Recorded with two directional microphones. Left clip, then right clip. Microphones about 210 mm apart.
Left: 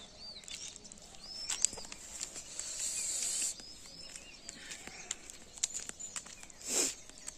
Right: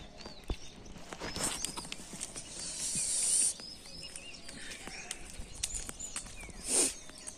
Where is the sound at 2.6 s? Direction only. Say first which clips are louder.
Right 1 dB; 5° left (ahead or behind).